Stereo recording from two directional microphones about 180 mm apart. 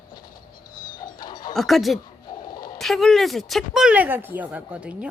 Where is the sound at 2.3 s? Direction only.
20° left (ahead or behind).